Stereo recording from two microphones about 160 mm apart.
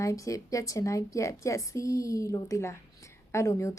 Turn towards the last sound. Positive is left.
turn(degrees=20)  # may be behind; listen again after turning